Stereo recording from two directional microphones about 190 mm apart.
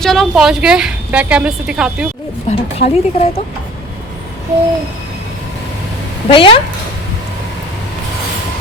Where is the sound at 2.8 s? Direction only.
50° left (ahead or behind).